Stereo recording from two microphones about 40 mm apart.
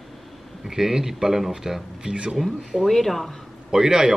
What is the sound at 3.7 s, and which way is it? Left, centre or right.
Speech, centre.